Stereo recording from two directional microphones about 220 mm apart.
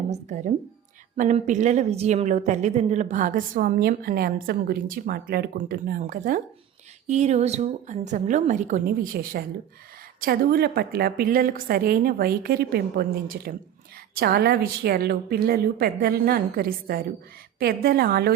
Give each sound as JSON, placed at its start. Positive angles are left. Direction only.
{"t": 0.1, "sound": "a woman's voice", "side_deg": -35}